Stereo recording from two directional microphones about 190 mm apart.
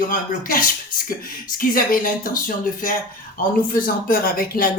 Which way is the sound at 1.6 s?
45° left (ahead or behind).